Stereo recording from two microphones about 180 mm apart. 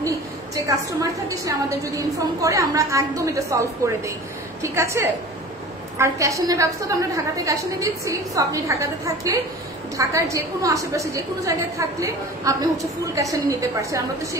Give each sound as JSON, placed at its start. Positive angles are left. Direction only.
{"t": 1.3, "sound": "a woman's voice", "side_deg": -20}